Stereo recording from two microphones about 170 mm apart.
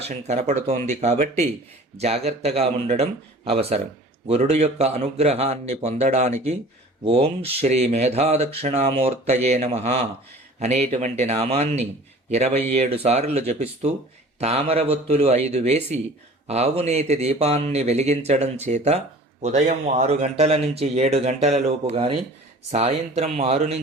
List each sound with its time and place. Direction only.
0.1 s speech: 40° right (ahead or behind)